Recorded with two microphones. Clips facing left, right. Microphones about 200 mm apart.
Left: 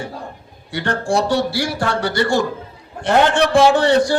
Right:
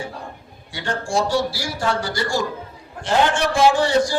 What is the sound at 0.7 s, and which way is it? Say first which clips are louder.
A man's voice: left 5 dB; 60° left (ahead or behind).